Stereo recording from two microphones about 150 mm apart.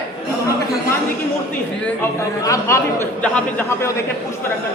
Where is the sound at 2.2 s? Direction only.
20° left (ahead or behind).